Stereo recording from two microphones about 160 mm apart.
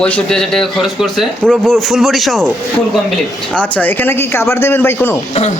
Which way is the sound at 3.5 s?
10° left (ahead or behind).